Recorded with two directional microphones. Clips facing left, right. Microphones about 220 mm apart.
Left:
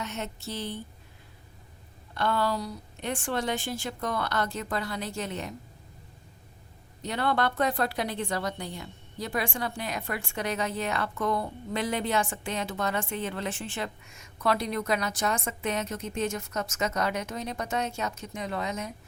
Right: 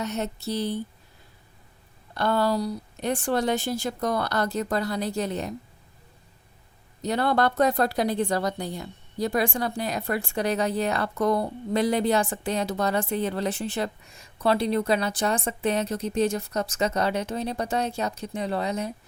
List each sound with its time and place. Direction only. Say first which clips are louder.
0.0 s a woman's voice: right 6 dB; 40° right (ahead or behind)
2.1 s a woman's voice: right 4 dB; 40° right (ahead or behind)
7.0 s a woman's voice: right 4 dB; 40° right (ahead or behind)